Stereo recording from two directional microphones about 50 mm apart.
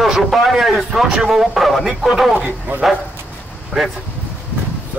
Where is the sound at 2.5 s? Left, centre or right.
Right.